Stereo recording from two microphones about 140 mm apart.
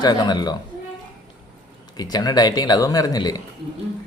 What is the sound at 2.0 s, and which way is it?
Speech, 30° left (ahead or behind).